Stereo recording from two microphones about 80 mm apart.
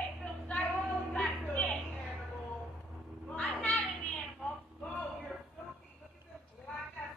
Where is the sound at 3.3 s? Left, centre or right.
Centre.